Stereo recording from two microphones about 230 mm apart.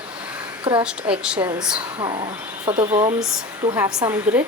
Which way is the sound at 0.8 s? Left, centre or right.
Centre.